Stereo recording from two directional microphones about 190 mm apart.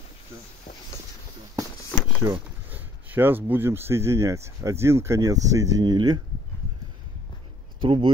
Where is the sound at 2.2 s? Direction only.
15° right (ahead or behind).